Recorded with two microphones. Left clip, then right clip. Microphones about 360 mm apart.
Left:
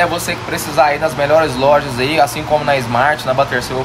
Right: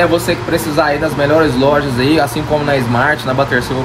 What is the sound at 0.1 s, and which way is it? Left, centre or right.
Speech, centre.